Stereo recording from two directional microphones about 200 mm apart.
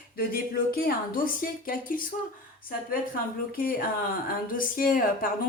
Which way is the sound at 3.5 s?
45° left (ahead or behind).